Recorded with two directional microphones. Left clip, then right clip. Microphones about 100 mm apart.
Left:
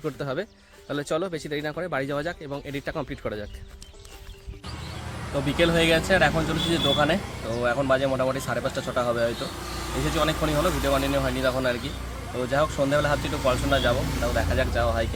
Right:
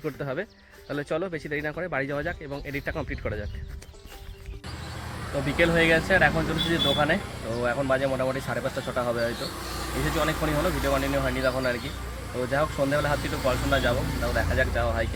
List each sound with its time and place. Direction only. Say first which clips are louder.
0.0 s speech: left 1 dB; 20° left (ahead or behind)
5.5 s speech: even; 25° left (ahead or behind)